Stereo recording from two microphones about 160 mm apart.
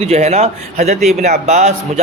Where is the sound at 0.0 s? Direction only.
40° right (ahead or behind).